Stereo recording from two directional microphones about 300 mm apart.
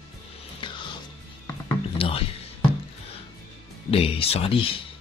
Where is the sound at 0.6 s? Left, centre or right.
Centre.